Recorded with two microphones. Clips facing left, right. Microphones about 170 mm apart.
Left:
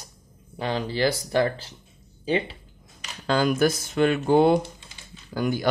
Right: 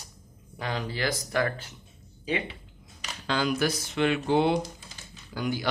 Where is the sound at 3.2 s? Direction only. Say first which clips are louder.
Left 5 dB; 45° left (ahead or behind).